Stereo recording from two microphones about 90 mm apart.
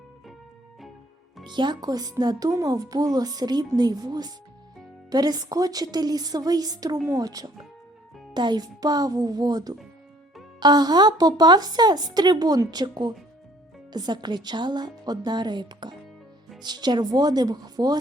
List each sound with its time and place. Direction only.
1.5 s speech: 55° right (ahead or behind)
8.3 s speech: 55° right (ahead or behind)